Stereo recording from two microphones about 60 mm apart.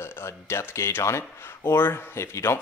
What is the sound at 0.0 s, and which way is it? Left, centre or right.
Speech, left.